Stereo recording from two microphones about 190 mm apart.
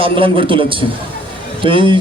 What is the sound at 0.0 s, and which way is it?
A man's voice, 25° right (ahead or behind).